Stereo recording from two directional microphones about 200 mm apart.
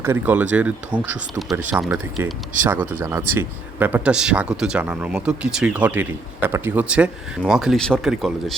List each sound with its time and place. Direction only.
0.0 s speech: 10° right (ahead or behind)
1.9 s speech: 20° right (ahead or behind); by 8.5 s centre (ahead or behind)